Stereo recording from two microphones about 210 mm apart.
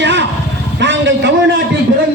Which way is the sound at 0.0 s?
55° right (ahead or behind).